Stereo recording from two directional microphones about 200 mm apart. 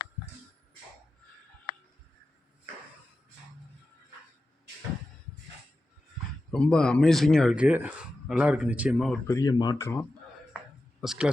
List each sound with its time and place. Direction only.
6.5 s speech: 5° left (ahead or behind)
9.2 s speech: 15° left (ahead or behind)
11.0 s speech: centre (ahead or behind)